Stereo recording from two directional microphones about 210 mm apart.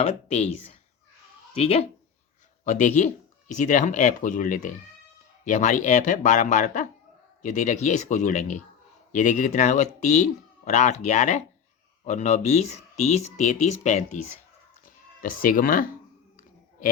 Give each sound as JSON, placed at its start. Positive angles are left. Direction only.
{"t": 0.0, "sound": "speech", "side_deg": 30}